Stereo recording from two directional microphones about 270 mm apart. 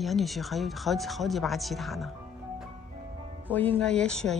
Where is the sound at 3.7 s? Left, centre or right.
Centre.